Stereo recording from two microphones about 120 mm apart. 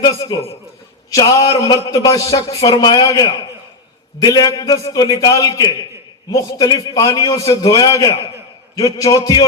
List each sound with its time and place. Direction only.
0.0 s a man's voice: 35° left (ahead or behind)